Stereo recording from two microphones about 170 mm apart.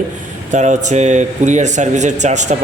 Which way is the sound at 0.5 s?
45° right (ahead or behind).